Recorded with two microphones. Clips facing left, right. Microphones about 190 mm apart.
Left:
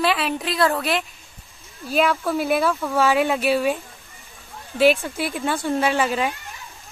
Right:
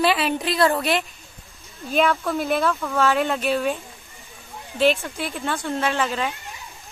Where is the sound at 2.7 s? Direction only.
15° left (ahead or behind).